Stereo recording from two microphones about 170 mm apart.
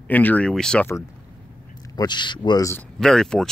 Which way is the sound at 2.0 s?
25° left (ahead or behind).